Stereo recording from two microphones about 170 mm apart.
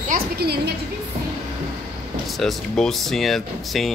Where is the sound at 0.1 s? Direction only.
70° right (ahead or behind).